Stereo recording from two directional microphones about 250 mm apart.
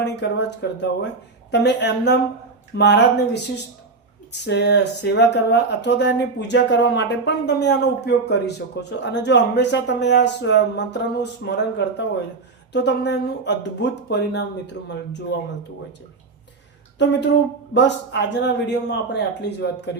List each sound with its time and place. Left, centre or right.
0.0 s speech: left
4.3 s speech: left
17.0 s speech: left